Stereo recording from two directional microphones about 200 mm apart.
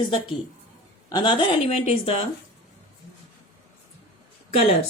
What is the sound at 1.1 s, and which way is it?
A woman's voice, 20° left (ahead or behind).